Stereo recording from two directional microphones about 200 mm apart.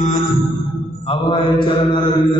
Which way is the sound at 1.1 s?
25° left (ahead or behind).